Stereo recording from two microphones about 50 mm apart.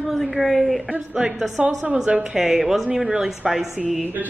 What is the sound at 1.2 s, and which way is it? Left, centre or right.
A woman's voice, centre.